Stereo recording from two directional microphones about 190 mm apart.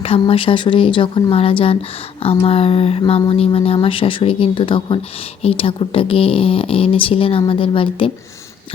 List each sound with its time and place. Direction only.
0.0 s speech: 30° left (ahead or behind)